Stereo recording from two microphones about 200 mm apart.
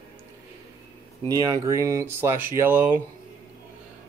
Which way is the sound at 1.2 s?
20° right (ahead or behind).